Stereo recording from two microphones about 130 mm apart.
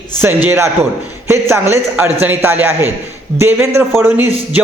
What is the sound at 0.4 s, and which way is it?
A man's voice, 20° right (ahead or behind).